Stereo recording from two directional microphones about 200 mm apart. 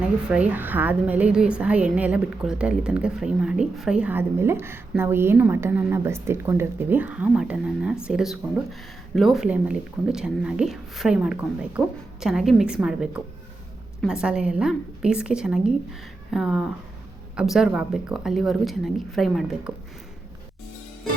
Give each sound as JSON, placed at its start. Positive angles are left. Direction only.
{"t": 0.3, "sound": "a woman's voice", "side_deg": -5}